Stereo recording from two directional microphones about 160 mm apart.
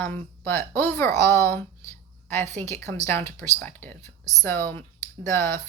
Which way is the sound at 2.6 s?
15° left (ahead or behind).